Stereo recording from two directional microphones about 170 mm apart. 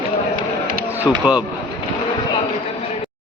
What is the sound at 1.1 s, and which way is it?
Speech, 5° right (ahead or behind).